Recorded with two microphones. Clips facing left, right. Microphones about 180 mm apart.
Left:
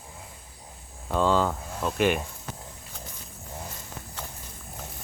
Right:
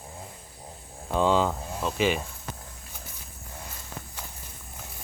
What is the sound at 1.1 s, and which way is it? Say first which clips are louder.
Speech: even; 10° right (ahead or behind).